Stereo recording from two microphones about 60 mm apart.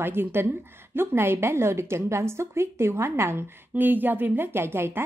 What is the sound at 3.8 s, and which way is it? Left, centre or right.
Speech, right.